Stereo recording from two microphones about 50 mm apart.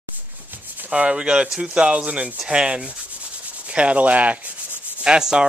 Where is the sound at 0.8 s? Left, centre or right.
Right.